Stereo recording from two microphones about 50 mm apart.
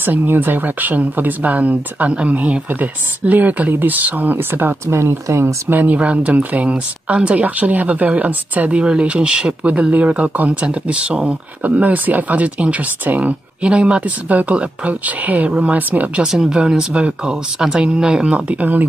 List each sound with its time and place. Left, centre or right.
0.0 s speech: right
5.7 s speech: right
13.6 s speech: right
16.3 s speech: centre; by 18.9 s right